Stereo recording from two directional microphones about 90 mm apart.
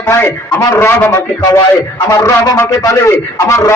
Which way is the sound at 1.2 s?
45° left (ahead or behind).